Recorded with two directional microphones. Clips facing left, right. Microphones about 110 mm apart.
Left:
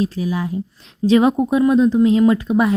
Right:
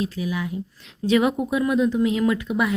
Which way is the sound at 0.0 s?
35° left (ahead or behind).